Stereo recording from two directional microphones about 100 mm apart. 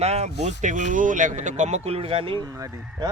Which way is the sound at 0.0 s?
90° right.